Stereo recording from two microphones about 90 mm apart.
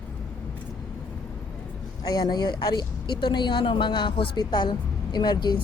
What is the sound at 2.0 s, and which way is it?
Speech, 45° left (ahead or behind).